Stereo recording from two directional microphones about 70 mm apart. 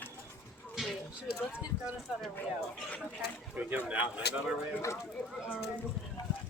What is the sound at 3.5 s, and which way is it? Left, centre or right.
Speech, right.